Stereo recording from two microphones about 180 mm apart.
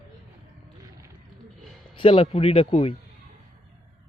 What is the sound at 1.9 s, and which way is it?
A man's voice, 30° left (ahead or behind).